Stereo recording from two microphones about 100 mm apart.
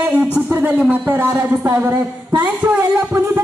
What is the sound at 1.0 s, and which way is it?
Speech, 25° right (ahead or behind).